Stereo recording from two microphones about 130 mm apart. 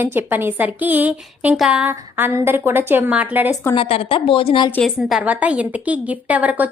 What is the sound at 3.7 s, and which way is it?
Speech, 50° left (ahead or behind).